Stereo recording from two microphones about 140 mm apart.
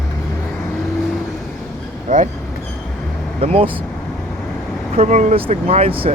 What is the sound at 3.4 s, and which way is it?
Speech, 45° right (ahead or behind).